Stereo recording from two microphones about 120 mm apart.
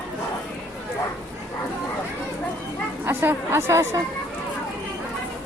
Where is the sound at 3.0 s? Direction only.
20° right (ahead or behind).